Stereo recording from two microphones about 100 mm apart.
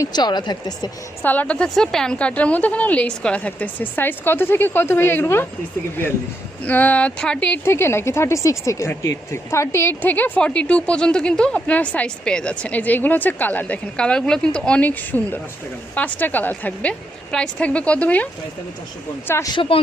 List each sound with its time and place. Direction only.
0.1 s speech: 45° left (ahead or behind)
1.2 s a man's voice: 15° left (ahead or behind)
7.6 s speech: 25° left (ahead or behind)
19.5 s speech: 65° left (ahead or behind)